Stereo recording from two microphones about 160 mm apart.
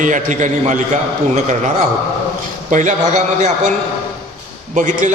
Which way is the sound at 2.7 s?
50° right (ahead or behind).